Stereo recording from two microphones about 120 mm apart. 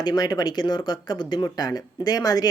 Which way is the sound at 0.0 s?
35° left (ahead or behind).